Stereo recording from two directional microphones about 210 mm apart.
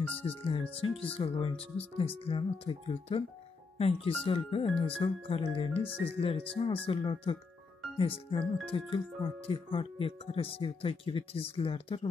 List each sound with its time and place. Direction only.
0.2 s speech: 25° left (ahead or behind)